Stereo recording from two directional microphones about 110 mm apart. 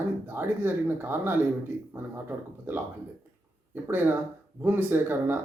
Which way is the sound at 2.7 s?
15° right (ahead or behind).